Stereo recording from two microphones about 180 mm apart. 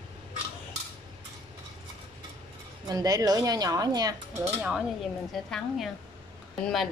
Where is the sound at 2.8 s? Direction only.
20° right (ahead or behind).